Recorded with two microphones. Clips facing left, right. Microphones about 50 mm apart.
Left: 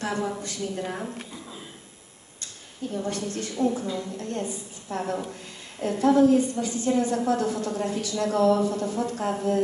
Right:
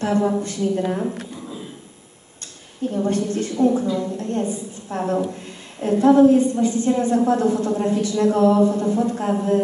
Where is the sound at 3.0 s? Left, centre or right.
Right.